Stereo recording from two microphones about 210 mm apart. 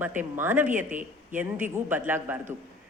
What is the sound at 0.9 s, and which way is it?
Speech, 40° right (ahead or behind).